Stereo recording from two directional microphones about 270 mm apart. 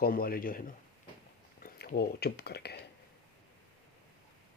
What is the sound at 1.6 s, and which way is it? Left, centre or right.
Speech, left.